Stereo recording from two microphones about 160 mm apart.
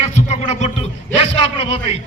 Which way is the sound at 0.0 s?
45° left (ahead or behind).